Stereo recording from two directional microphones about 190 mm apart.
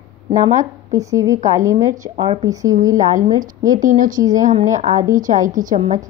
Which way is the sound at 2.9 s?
45° right (ahead or behind).